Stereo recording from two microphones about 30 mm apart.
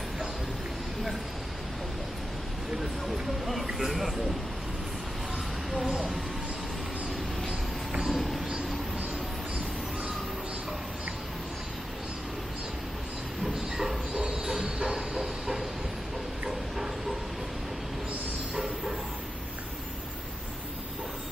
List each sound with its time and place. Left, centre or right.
3.6 s speech: centre
8.1 s a sound: centre
13.4 s train: centre
14.1 s train: right
16.4 s dog: centre
18.5 s bow-wow: centre